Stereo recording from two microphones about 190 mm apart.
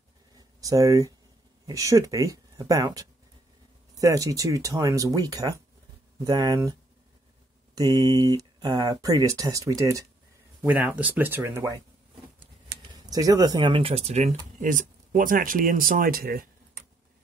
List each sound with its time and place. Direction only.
0.6 s speech: 15° right (ahead or behind)
7.7 s speech: 20° right (ahead or behind)
12.7 s a sound: 55° right (ahead or behind)
13.0 s speech: 20° right (ahead or behind); by 16.4 s 50° right (ahead or behind)